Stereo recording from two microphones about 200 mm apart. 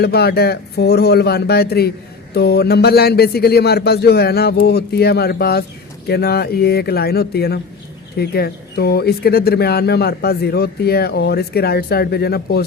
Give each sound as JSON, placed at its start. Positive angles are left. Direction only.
{"t": 0.0, "sound": "speech", "side_deg": 55}